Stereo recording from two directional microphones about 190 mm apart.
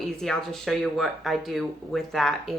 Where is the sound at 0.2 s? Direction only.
Centre (ahead or behind).